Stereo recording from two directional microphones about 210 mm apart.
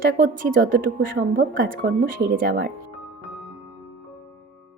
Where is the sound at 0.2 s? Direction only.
45° right (ahead or behind).